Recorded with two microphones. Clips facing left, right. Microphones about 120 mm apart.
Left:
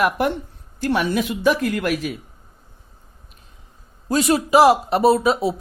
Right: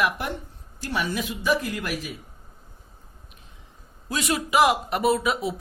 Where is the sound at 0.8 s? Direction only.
60° left (ahead or behind).